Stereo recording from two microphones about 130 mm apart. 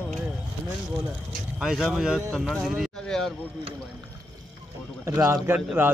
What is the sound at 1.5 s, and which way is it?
Speech, 5° right (ahead or behind).